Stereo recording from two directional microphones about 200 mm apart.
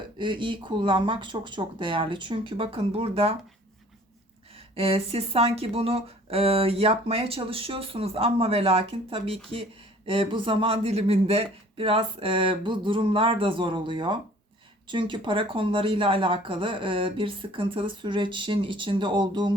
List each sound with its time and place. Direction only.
0.2 s speech: 25° right (ahead or behind)
4.7 s speech: 30° right (ahead or behind)